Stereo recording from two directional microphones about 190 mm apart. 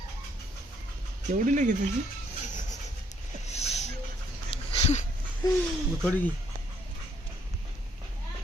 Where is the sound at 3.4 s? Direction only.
35° left (ahead or behind).